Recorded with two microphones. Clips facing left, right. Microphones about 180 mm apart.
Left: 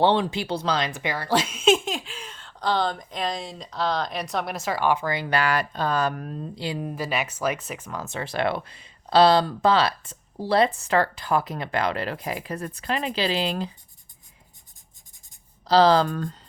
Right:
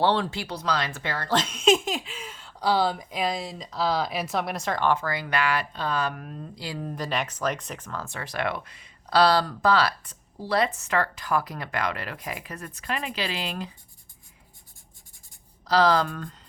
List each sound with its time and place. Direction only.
0.0 s speech: 20° left (ahead or behind); by 6.4 s 35° left (ahead or behind)
6.6 s speech: 20° left (ahead or behind)
15.6 s speech: 30° left (ahead or behind)